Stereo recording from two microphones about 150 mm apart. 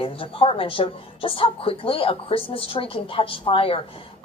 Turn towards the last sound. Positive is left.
turn(degrees=40)  # may be behind; listen again after turning